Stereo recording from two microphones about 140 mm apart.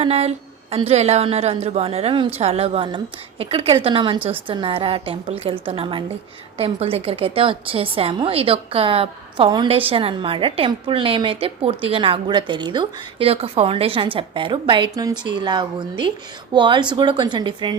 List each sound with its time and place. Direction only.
0.0 s a woman's voice: 50° right (ahead or behind); by 17.7 s 30° right (ahead or behind)